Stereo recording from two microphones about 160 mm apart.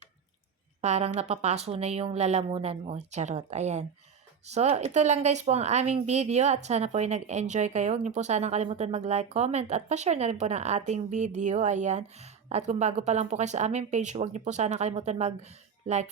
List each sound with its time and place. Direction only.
0.8 s speech: 45° right (ahead or behind)